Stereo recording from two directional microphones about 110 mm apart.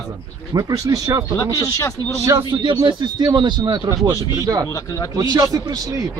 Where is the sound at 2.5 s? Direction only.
45° right (ahead or behind).